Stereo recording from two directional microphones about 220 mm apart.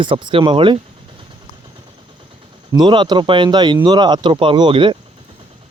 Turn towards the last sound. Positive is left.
turn(degrees=-20)  # may be behind; listen again after turning